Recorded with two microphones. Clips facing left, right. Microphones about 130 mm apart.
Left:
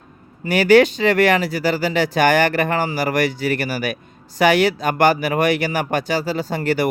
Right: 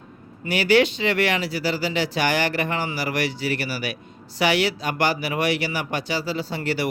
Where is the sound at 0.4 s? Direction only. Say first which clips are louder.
Left 6 dB; 45° left (ahead or behind).